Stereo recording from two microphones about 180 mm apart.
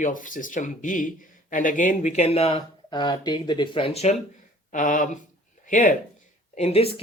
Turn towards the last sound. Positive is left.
turn(degrees=35)  # may be behind; listen again after turning